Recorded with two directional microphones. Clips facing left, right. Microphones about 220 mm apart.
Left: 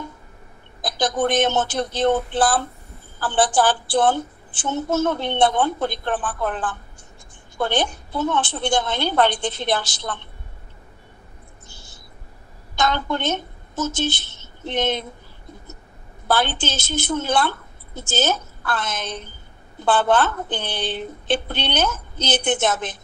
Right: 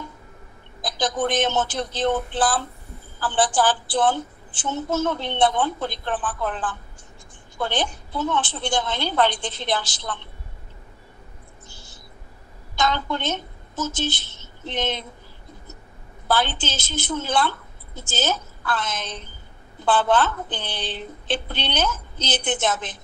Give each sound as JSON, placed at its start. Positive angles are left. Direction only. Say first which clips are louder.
{"t": 0.8, "sound": "a woman's voice", "louder": "left 3 dB", "side_deg": 60}
{"t": 12.7, "sound": "a woman's voice", "louder": "left 2 dB", "side_deg": 55}
{"t": 14.6, "sound": "a woman's voice", "louder": "left 4 dB", "side_deg": 55}
{"t": 16.3, "sound": "a woman's voice", "louder": "left 2 dB", "side_deg": 60}